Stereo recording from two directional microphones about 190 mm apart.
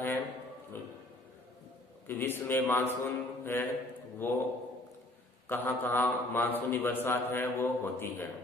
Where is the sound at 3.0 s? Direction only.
10° left (ahead or behind).